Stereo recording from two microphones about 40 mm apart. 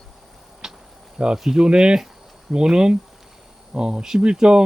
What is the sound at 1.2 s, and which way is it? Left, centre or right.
Speech, right.